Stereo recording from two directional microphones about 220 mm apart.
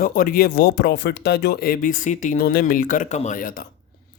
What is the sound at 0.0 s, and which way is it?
Speech, 40° left (ahead or behind).